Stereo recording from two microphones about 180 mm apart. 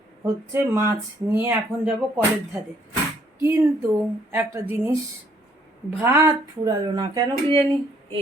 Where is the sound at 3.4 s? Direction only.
15° right (ahead or behind).